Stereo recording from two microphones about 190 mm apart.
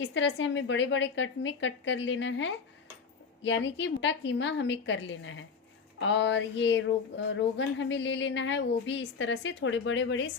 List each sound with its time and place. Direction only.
0.0 s a woman's voice: 70° left (ahead or behind); by 5.5 s 90° left
6.0 s a woman's voice: 70° left (ahead or behind)